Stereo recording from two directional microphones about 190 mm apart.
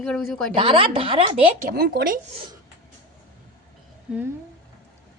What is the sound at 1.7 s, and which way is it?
Speech, 60° right (ahead or behind).